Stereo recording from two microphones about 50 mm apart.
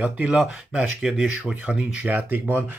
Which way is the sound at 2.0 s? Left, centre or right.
Right.